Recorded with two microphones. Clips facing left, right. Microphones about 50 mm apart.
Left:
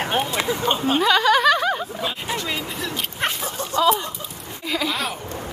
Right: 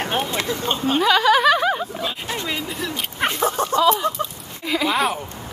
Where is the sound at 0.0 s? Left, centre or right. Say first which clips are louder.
Left 1 dB; centre.